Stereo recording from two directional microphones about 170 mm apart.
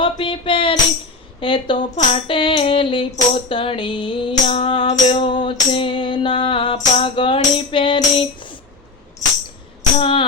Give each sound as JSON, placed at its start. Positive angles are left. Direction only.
{"t": 0.0, "sound": "music", "side_deg": 30}
{"t": 2.0, "sound": "a sound", "side_deg": 30}
{"t": 3.5, "sound": "music", "side_deg": 30}
{"t": 10.0, "sound": "tambourine", "side_deg": 30}